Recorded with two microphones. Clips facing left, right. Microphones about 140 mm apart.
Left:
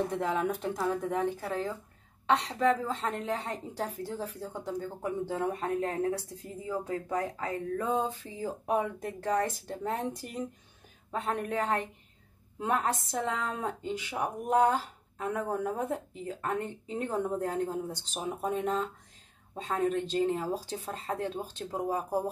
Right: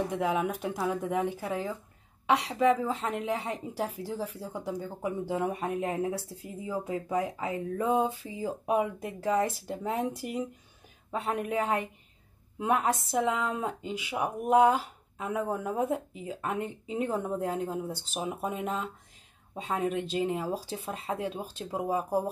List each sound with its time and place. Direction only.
0.1 s a woman's voice: 5° right (ahead or behind)